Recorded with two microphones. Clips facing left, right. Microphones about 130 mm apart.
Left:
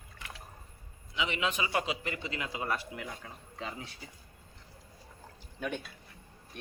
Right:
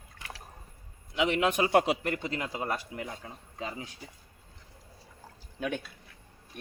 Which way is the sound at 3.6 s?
5° right (ahead or behind).